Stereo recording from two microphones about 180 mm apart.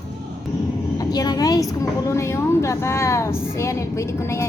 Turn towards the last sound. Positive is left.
turn(degrees=15)  # may be behind; listen again after turning